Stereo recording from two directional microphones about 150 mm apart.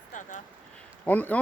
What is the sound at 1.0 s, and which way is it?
Speech, 10° left (ahead or behind).